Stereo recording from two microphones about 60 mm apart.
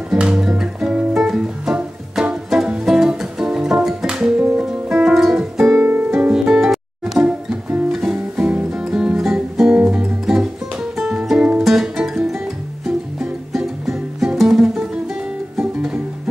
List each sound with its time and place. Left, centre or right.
0.1 s music: centre
5.8 s music: right
6.0 s music: centre
8.4 s music: right
8.6 s music: centre
9.8 s music: centre